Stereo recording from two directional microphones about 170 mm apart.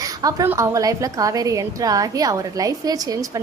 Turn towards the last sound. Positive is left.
turn(degrees=-20)  # may be behind; listen again after turning